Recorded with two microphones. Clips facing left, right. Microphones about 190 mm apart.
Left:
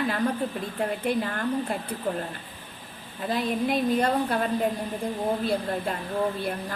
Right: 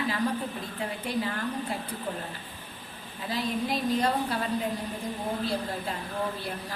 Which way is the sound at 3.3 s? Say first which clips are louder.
Left 4 dB; 55° left (ahead or behind).